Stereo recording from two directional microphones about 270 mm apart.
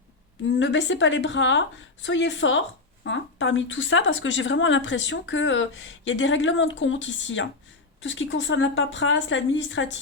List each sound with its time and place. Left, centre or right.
0.6 s speech: left